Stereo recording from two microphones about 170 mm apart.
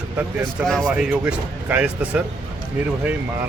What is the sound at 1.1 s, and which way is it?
Speech, 5° right (ahead or behind).